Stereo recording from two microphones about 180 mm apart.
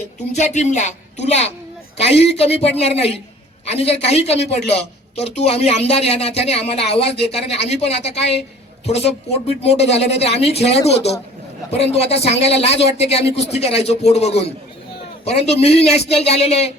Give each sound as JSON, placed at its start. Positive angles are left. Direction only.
{"t": 0.3, "sound": "a woman's voice", "side_deg": 40}